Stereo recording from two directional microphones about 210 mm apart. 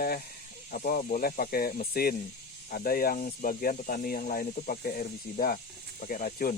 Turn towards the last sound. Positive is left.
turn(degrees=40)  # may be behind; listen again after turning